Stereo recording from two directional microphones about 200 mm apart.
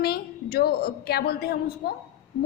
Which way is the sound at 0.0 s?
50° left (ahead or behind).